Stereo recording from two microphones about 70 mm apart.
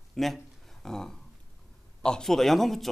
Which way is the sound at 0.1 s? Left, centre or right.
Centre.